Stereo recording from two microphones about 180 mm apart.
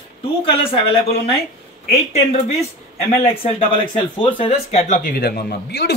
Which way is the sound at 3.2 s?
30° left (ahead or behind).